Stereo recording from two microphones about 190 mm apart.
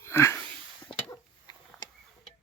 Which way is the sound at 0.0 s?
15° left (ahead or behind).